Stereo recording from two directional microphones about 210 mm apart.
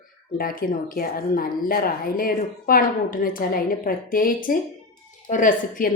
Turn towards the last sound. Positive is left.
turn(degrees=40)  # may be behind; listen again after turning